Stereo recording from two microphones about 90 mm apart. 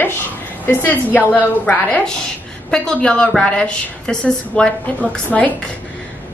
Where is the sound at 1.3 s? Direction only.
20° left (ahead or behind).